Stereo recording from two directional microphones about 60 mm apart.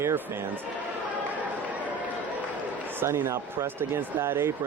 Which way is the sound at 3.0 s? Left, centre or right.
Right.